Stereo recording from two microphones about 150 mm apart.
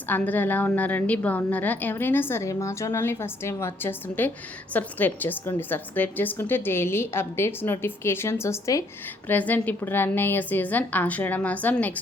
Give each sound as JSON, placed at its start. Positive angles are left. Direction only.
{"t": 0.1, "sound": "a woman's voice", "side_deg": 10}